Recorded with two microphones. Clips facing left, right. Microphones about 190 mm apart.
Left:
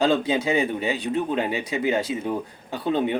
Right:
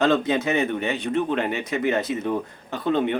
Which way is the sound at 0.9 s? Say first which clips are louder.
Right 1 dB; 35° left (ahead or behind).